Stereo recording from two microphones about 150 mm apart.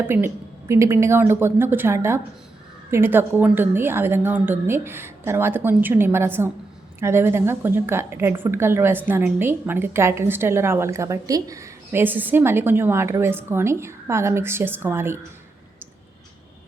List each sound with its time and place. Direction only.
0.7 s a woman's voice: 20° right (ahead or behind)